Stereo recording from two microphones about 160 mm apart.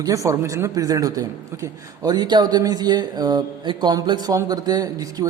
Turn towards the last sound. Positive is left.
turn(degrees=-20)  # may be behind; listen again after turning